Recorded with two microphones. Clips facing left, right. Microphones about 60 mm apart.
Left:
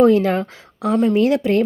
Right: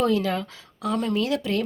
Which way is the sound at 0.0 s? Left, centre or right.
Left.